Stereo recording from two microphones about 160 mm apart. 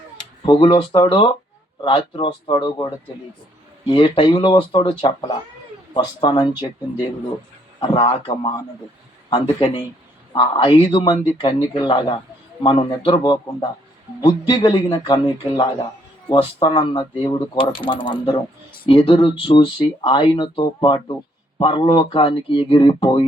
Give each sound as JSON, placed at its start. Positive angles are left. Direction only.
{"t": 0.2, "sound": "speech", "side_deg": 30}
{"t": 7.8, "sound": "speech", "side_deg": 30}